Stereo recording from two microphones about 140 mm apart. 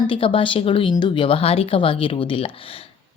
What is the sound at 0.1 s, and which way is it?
A woman's voice, 40° left (ahead or behind).